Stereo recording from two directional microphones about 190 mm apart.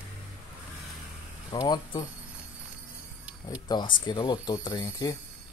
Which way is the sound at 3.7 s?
25° left (ahead or behind).